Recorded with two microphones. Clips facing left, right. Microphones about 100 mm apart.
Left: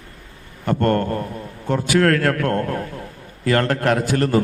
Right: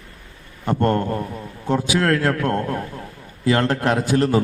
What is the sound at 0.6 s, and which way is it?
A man's voice, 15° right (ahead or behind).